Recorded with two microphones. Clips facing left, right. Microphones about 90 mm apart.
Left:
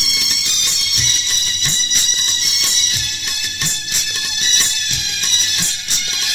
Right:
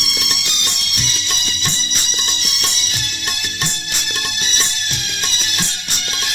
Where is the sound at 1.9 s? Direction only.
50° right (ahead or behind).